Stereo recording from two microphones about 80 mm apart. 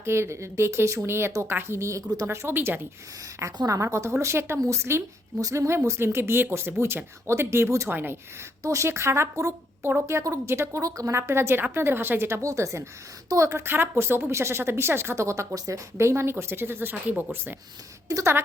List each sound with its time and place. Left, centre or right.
0.0 s speech: right
2.2 s speech: right
3.6 s speech: right
12.4 s speech: right
13.7 s speech: right
18.1 s speech: right